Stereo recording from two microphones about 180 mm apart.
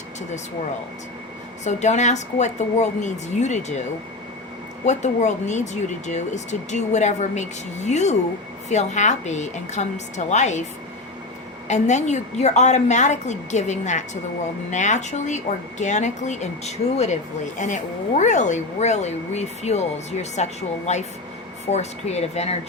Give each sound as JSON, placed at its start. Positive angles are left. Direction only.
{"t": 1.6, "sound": "speech", "side_deg": 40}
{"t": 4.9, "sound": "speech", "side_deg": 40}
{"t": 11.7, "sound": "speech", "side_deg": 40}